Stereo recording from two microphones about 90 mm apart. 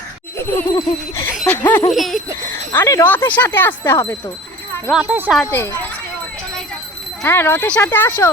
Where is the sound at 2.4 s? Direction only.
30° left (ahead or behind).